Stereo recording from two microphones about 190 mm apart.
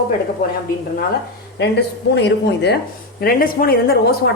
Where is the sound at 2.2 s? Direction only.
65° left (ahead or behind).